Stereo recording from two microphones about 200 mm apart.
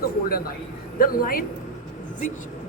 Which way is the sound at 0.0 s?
50° left (ahead or behind).